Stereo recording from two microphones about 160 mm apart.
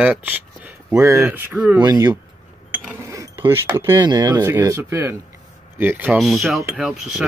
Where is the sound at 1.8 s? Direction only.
25° right (ahead or behind).